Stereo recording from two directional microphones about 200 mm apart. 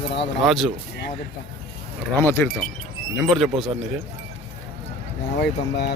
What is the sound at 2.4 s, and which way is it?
Speech, 10° left (ahead or behind).